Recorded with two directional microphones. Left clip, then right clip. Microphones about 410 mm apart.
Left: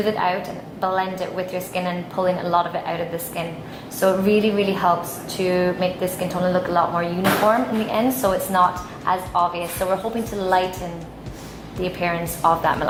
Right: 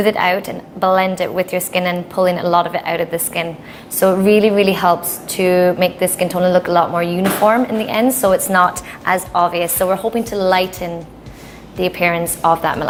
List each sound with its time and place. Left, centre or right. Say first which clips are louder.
0.0 s a woman's voice: right 6 dB; right
11.8 s a woman's voice: right 7 dB; right